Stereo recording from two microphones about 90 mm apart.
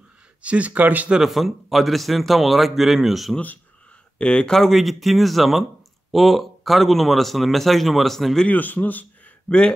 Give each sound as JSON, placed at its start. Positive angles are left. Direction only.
{"t": 0.4, "sound": "speech", "side_deg": -15}
{"t": 1.2, "sound": "speech", "side_deg": 0}
{"t": 4.2, "sound": "speech", "side_deg": 10}
{"t": 8.5, "sound": "speech", "side_deg": 20}